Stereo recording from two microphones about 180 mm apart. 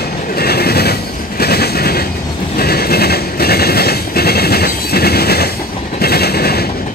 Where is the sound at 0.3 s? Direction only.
60° left (ahead or behind).